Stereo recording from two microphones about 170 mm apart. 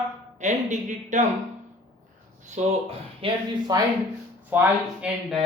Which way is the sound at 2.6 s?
45° right (ahead or behind).